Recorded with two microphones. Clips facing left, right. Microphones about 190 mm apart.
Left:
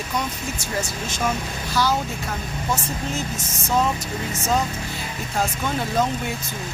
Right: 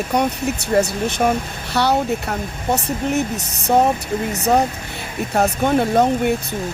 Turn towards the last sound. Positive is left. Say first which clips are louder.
# right 9 dB
turn(degrees=-60)  # may be behind; listen again after turning